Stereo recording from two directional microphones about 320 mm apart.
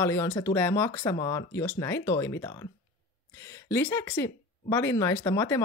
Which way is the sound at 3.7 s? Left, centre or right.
Centre.